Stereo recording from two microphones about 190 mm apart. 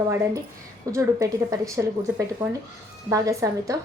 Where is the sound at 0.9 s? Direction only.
15° right (ahead or behind).